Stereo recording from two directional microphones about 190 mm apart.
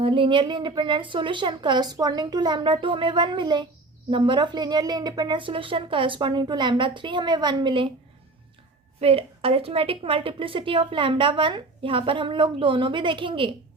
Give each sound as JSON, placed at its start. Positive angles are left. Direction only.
{"t": 0.0, "sound": "a woman's voice", "side_deg": -25}
{"t": 9.0, "sound": "a woman's voice", "side_deg": -30}